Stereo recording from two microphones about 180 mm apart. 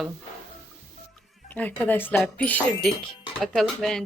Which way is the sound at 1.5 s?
10° left (ahead or behind).